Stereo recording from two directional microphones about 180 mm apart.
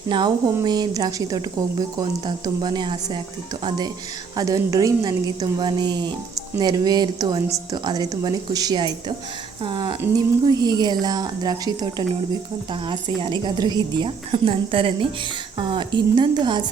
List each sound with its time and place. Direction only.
0.1 s speech: 25° right (ahead or behind)